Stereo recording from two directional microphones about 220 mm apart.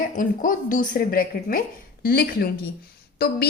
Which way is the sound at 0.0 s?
35° left (ahead or behind).